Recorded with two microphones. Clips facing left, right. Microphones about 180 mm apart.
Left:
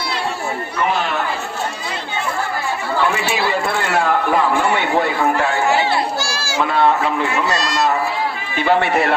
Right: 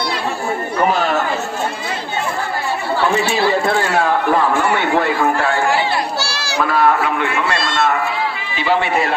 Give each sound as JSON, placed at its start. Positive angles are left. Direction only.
{"t": 6.1, "sound": "children playing", "side_deg": 50}
{"t": 6.7, "sound": "a man's voice", "side_deg": 25}
{"t": 8.5, "sound": "a man's voice", "side_deg": 55}